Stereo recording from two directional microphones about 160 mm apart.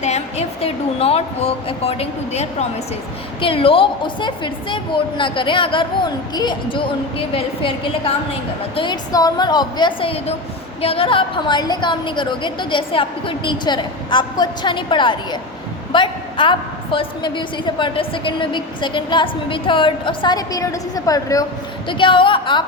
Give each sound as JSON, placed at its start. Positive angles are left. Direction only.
{"t": 0.0, "sound": "a woman's voice", "side_deg": 45}